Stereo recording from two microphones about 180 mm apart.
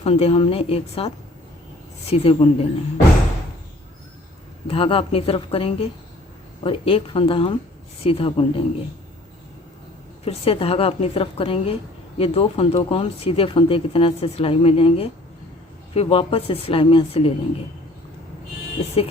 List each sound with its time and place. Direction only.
0.0 s a woman's voice: 35° left (ahead or behind)
4.7 s a woman's voice: 30° left (ahead or behind)
10.2 s a woman's voice: 30° left (ahead or behind)